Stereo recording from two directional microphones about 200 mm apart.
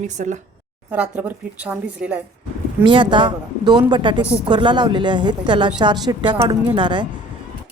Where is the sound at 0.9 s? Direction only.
5° right (ahead or behind).